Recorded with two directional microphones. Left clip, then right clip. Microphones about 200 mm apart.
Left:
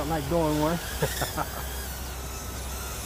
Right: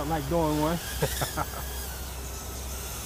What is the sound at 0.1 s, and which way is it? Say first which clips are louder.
Speech: left 1 dB; 10° right (ahead or behind).